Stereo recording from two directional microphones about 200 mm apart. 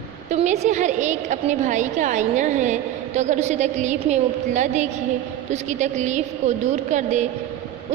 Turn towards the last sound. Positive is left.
turn(degrees=-35)  # may be behind; listen again after turning